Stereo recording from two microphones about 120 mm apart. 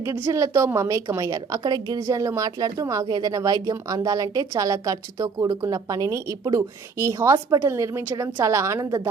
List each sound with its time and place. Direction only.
0.3 s a woman's voice: 25° right (ahead or behind)